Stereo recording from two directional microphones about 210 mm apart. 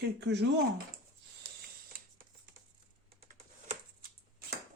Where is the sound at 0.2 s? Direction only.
55° right (ahead or behind).